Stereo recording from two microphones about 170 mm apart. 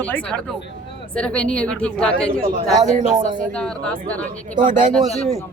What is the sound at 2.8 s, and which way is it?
Speech, 45° right (ahead or behind).